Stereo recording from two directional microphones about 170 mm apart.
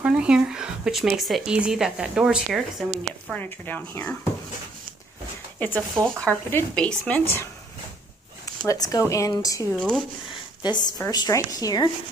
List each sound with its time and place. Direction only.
0.0 s speech: 5° right (ahead or behind); by 4.3 s 10° left (ahead or behind)
5.6 s speech: 10° left (ahead or behind)
8.6 s a woman's voice: 20° left (ahead or behind)
9.8 s speech: 5° left (ahead or behind)
10.6 s a woman's voice: 25° left (ahead or behind)